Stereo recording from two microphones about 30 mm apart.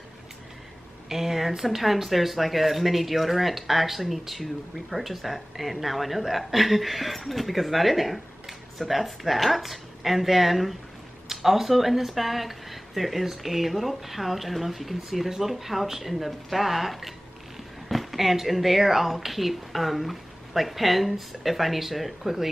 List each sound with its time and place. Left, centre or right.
1.0 s speech: centre